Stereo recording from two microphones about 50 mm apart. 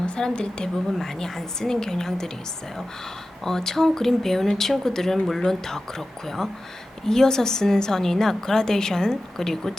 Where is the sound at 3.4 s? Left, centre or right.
Centre.